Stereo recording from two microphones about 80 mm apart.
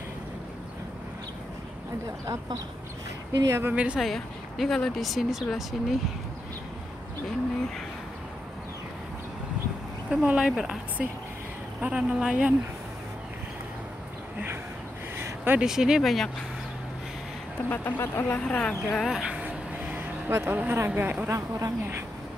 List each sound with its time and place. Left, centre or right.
3.4 s a woman's voice: right
3.7 s speech: centre
4.0 s speech: centre
10.0 s speech: centre
11.8 s speech: centre
15.1 s a sound: right
15.6 s speech: centre
17.6 s speech: left
19.0 s a sound: centre
21.3 s a woman's voice: right